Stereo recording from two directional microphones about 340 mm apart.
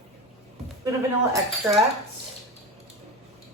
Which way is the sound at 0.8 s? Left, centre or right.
Centre.